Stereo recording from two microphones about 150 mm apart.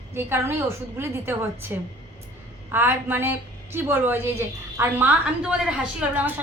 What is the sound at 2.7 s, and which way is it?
A woman's voice, 15° right (ahead or behind).